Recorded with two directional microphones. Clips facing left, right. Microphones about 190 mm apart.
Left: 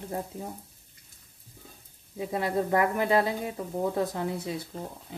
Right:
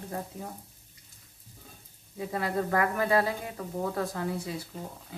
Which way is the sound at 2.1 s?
20° left (ahead or behind).